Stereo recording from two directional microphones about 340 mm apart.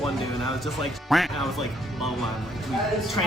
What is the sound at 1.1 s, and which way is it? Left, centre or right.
Speech, centre.